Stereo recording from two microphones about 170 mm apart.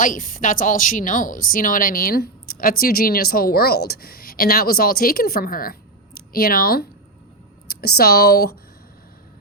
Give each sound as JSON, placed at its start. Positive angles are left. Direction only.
{"t": 0.0, "sound": "speech", "side_deg": 50}